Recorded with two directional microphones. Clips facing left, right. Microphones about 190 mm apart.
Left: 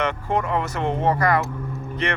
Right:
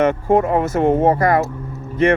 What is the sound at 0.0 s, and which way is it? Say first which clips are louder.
Speech: right 9 dB; 50° right (ahead or behind).